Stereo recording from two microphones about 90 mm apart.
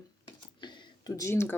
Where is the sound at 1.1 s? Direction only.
35° left (ahead or behind).